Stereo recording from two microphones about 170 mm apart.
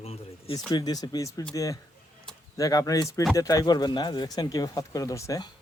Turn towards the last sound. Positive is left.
turn(degrees=20)  # may be behind; listen again after turning